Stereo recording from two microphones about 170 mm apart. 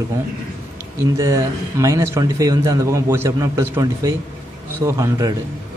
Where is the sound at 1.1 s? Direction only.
20° right (ahead or behind).